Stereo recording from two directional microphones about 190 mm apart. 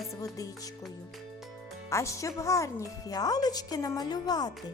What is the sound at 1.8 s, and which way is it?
Speech, 15° left (ahead or behind).